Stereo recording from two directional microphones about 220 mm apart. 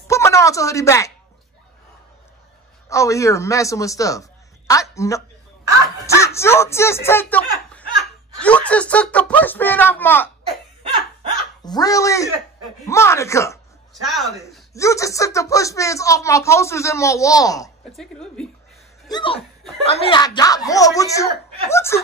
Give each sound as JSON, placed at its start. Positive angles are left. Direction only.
{"t": 0.1, "sound": "speech", "side_deg": 15}
{"t": 2.9, "sound": "speech", "side_deg": 15}
{"t": 11.6, "sound": "speech", "side_deg": 15}
{"t": 14.7, "sound": "speech", "side_deg": 15}
{"t": 17.9, "sound": "a woman's voice", "side_deg": 5}
{"t": 19.0, "sound": "speech", "side_deg": 20}